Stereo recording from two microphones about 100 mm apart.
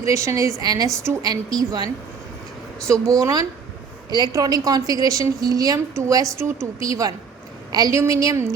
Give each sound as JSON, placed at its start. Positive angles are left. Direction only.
{"t": 0.0, "sound": "a woman's voice", "side_deg": -30}
{"t": 2.8, "sound": "a woman's voice", "side_deg": -35}